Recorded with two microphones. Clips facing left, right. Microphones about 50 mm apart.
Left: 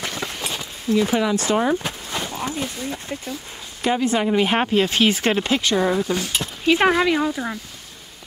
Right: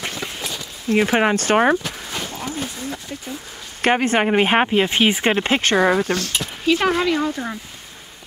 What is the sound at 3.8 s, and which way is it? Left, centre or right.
Speech, right.